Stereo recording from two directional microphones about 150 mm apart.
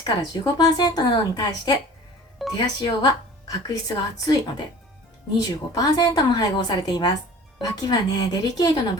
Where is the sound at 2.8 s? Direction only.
25° left (ahead or behind).